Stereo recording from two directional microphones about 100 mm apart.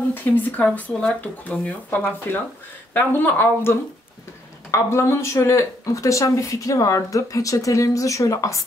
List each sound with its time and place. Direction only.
0.1 s speech: 20° left (ahead or behind)